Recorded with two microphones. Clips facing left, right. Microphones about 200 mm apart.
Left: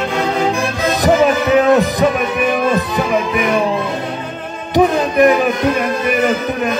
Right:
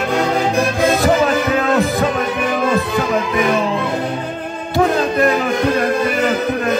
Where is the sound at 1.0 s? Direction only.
15° left (ahead or behind).